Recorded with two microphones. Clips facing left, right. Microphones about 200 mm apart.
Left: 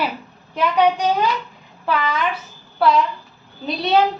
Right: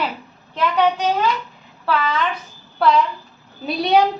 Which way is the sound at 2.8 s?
Centre (ahead or behind).